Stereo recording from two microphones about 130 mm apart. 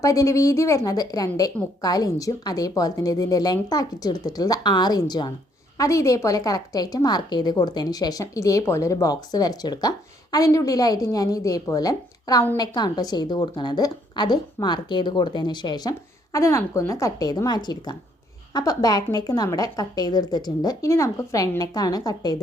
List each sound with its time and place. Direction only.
0.0 s a woman's voice: 25° left (ahead or behind)